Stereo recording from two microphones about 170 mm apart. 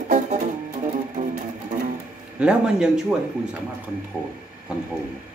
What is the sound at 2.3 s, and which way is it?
Speech, 5° right (ahead or behind).